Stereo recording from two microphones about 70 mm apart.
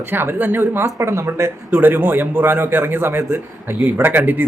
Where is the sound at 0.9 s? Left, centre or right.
Right.